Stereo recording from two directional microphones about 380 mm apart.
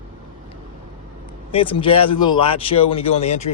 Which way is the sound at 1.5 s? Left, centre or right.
Centre.